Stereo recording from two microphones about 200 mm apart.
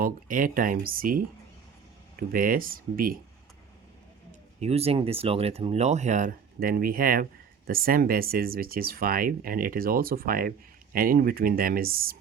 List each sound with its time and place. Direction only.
0.0 s speech: 45° right (ahead or behind)
4.3 s speech: 30° right (ahead or behind); by 12.1 s 45° right (ahead or behind)